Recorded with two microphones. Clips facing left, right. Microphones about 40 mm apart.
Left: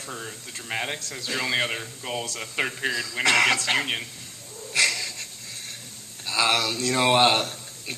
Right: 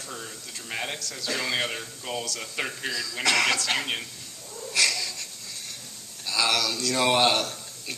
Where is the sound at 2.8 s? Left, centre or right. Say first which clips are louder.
Left 4 dB; left.